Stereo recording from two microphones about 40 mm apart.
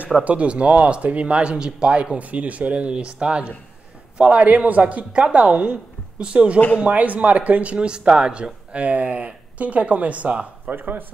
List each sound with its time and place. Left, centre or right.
0.2 s speech: right
2.1 s a woman's voice: right
8.7 s a woman's voice: right
10.7 s speech: right